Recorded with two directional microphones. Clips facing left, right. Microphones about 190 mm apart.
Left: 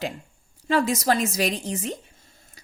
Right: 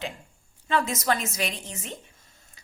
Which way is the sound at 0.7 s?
35° left (ahead or behind).